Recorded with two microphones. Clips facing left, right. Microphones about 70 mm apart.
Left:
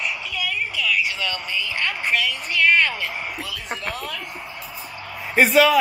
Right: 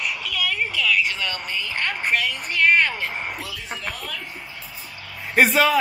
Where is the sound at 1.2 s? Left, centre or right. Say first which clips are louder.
Left 1 dB; right.